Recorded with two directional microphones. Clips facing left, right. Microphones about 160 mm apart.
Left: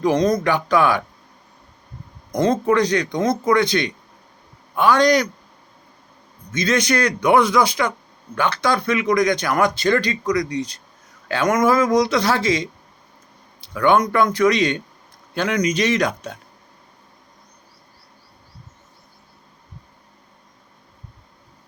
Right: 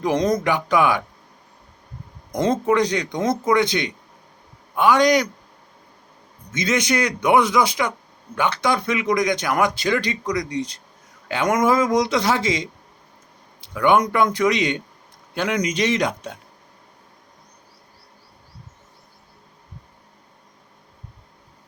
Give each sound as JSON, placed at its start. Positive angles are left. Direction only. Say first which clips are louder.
{"t": 0.0, "sound": "speech", "louder": "left 2 dB", "side_deg": -20}
{"t": 2.3, "sound": "speech", "louder": "left 2 dB", "side_deg": -25}
{"t": 6.5, "sound": "speech", "louder": "left 2 dB", "side_deg": -20}
{"t": 10.0, "sound": "speech", "louder": "left 3 dB", "side_deg": -20}
{"t": 13.7, "sound": "speech", "louder": "left 1 dB", "side_deg": -15}